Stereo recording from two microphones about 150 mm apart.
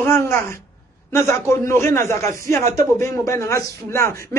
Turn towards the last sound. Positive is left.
turn(degrees=20)  # may be behind; listen again after turning